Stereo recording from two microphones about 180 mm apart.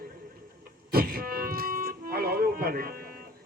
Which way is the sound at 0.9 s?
55° right (ahead or behind).